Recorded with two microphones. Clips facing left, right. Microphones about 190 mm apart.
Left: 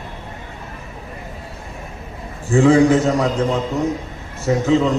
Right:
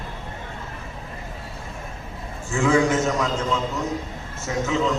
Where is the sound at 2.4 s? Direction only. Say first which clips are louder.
Left 7 dB; 35° left (ahead or behind).